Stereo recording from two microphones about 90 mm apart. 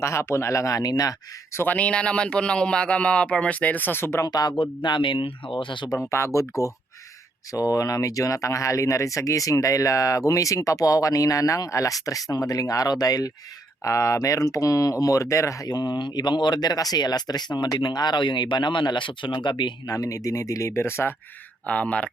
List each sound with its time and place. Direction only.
0.0 s speech: 30° left (ahead or behind)
1.5 s speech: 20° left (ahead or behind)
4.2 s speech: 45° left (ahead or behind)
4.6 s speech: 65° left (ahead or behind)
6.1 s speech: 35° left (ahead or behind)
7.5 s speech: 40° left (ahead or behind); by 19.7 s 60° left (ahead or behind)
19.9 s speech: 40° left (ahead or behind)
21.7 s speech: 15° left (ahead or behind)